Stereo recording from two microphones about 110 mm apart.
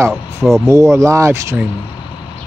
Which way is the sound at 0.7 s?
25° right (ahead or behind).